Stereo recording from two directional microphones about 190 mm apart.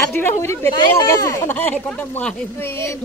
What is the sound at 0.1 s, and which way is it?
Speech, 10° left (ahead or behind).